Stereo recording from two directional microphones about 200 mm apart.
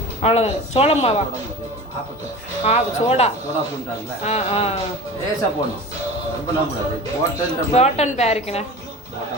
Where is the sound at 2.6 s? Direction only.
30° left (ahead or behind).